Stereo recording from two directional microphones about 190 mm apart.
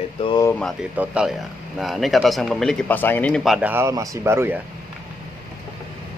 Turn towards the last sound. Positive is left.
turn(degrees=-10)  # may be behind; listen again after turning